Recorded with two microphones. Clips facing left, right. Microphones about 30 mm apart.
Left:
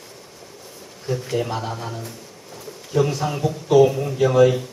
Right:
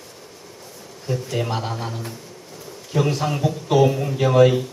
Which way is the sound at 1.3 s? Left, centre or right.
Centre.